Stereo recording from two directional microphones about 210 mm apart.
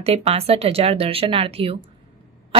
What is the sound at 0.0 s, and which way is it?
A woman's voice, 30° right (ahead or behind).